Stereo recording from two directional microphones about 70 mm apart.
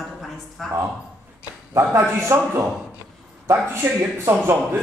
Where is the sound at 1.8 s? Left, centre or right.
Right.